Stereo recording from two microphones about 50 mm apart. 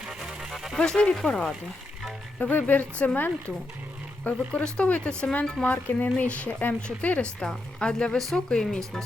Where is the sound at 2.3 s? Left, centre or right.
Left.